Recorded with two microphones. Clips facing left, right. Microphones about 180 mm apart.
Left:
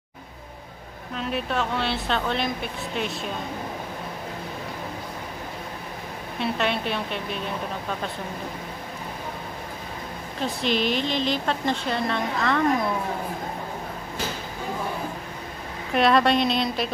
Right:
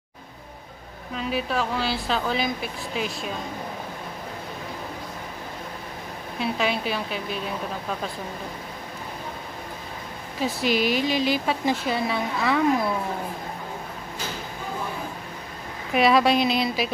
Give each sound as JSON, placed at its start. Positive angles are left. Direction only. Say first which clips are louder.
{"t": 1.1, "sound": "speech", "louder": "right 1 dB", "side_deg": 0}
{"t": 6.4, "sound": "speech", "louder": "even", "side_deg": 0}
{"t": 10.4, "sound": "speech", "louder": "right 1 dB", "side_deg": -5}
{"t": 15.9, "sound": "speech", "louder": "even", "side_deg": -5}